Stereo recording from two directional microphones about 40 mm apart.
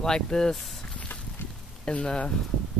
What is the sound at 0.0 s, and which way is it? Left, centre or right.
Speech, centre.